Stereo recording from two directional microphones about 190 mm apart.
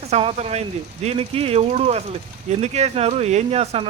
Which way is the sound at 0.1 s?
30° right (ahead or behind).